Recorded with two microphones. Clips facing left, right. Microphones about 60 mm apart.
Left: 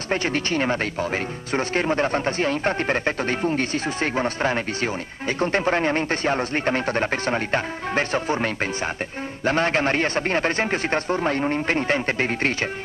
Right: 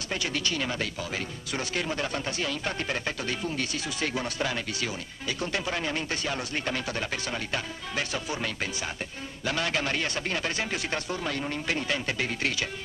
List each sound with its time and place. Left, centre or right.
0.1 s speech: left